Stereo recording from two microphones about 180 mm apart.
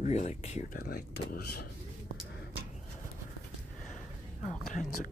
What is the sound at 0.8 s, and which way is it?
Speech, 60° left (ahead or behind).